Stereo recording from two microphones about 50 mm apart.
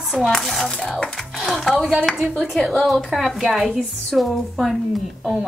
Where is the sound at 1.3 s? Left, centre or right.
Centre.